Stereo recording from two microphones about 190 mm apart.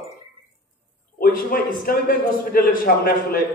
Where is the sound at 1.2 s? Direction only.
50° left (ahead or behind).